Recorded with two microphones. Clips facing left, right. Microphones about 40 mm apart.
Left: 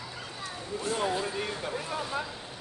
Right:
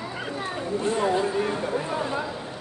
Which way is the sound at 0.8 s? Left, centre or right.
Right.